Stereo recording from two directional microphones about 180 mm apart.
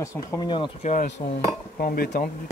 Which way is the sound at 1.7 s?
55° left (ahead or behind).